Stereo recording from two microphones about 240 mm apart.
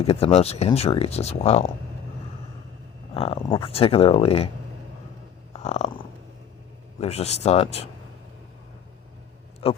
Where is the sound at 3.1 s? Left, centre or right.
Left.